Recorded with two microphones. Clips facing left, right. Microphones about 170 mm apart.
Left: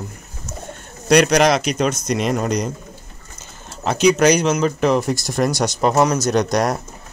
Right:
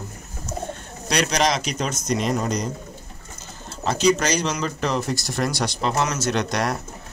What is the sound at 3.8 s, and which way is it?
Speech, 60° left (ahead or behind).